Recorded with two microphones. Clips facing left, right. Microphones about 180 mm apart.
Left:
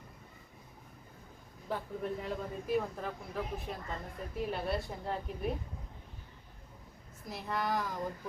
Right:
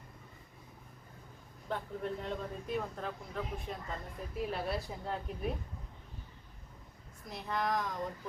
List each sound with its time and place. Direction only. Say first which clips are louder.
1.7 s speech: left 1 dB; 5° left (ahead or behind)
7.3 s speech: even; centre (ahead or behind)